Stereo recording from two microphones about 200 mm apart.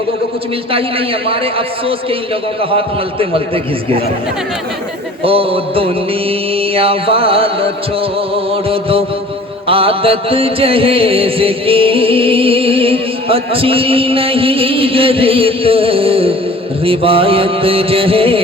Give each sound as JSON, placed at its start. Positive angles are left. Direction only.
{"t": 0.7, "sound": "music", "side_deg": -25}
{"t": 5.2, "sound": "music", "side_deg": -30}